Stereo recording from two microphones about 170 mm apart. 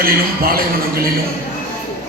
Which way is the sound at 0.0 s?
60° right (ahead or behind).